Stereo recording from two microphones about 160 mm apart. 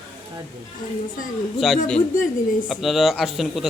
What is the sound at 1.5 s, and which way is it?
Speech, centre (ahead or behind).